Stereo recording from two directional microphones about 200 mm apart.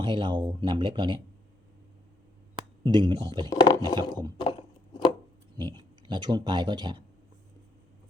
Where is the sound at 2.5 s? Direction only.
25° right (ahead or behind).